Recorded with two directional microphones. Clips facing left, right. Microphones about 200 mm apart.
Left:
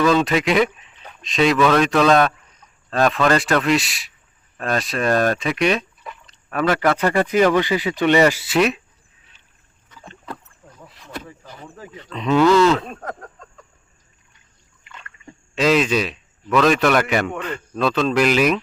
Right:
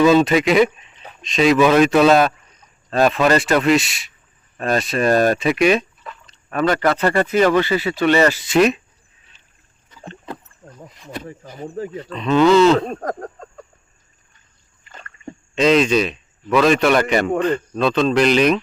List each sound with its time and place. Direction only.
0.1 s speech: 5° right (ahead or behind)
6.5 s speech: 5° left (ahead or behind)
12.1 s speech: 15° left (ahead or behind)
12.5 s speech: 25° right (ahead or behind)
12.8 s a sound: 40° right (ahead or behind)
14.8 s splash: 40° right (ahead or behind)
15.5 s a man's voice: 5° left (ahead or behind)
17.2 s a man's voice: 40° right (ahead or behind)
17.7 s speech: 5° left (ahead or behind)